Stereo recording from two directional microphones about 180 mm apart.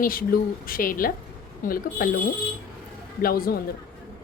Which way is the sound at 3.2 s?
55° left (ahead or behind).